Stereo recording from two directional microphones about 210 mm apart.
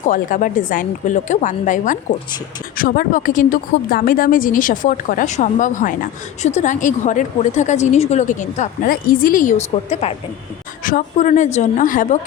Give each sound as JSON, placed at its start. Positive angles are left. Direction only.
{"t": 0.0, "sound": "a woman's voice", "side_deg": 40}